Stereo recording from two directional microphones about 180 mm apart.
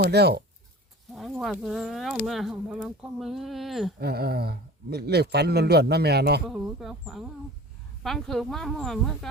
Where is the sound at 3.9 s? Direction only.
60° right (ahead or behind).